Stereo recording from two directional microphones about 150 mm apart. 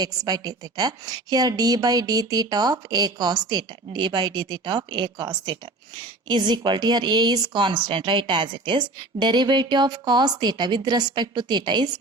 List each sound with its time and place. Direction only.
0.0 s speech: 25° right (ahead or behind)